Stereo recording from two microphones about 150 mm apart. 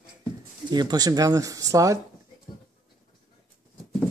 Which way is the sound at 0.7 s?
30° right (ahead or behind).